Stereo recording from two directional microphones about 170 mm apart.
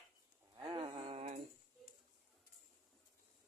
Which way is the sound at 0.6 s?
30° right (ahead or behind).